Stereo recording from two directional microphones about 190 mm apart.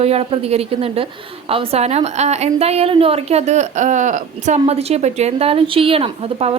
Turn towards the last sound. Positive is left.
turn(degrees=-30)  # may be behind; listen again after turning